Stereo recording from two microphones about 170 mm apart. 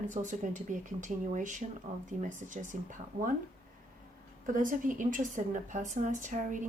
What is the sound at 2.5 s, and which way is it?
Speech, 50° right (ahead or behind).